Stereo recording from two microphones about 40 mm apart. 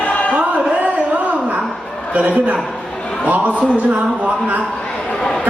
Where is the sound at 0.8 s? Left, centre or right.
Right.